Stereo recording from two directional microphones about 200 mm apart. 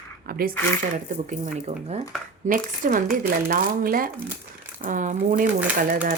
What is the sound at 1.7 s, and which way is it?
Speech, 30° right (ahead or behind).